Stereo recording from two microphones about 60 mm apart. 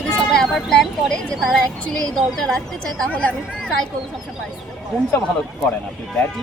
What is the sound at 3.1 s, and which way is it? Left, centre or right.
Speech, left.